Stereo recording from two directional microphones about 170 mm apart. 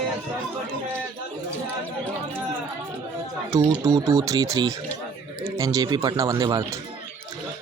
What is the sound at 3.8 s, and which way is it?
Speech, 20° right (ahead or behind).